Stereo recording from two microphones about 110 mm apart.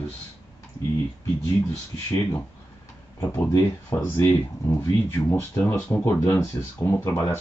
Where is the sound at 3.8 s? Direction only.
20° left (ahead or behind).